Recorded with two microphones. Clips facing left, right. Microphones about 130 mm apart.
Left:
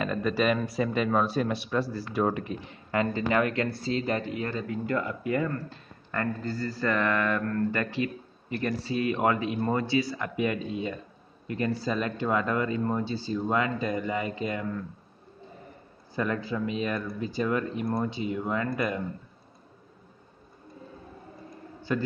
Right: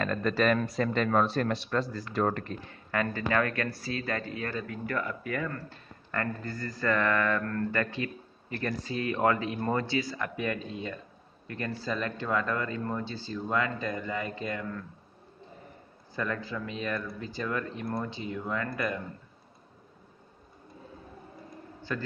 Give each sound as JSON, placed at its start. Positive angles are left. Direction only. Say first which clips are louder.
{"t": 0.0, "sound": "speech", "louder": "left 1 dB", "side_deg": 10}
{"t": 16.2, "sound": "speech", "louder": "left 4 dB", "side_deg": 15}
{"t": 21.9, "sound": "speech", "louder": "left 6 dB", "side_deg": 20}